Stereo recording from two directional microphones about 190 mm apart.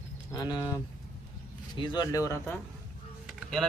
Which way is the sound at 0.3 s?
20° left (ahead or behind).